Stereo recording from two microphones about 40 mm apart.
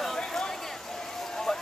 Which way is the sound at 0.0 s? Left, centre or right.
Centre.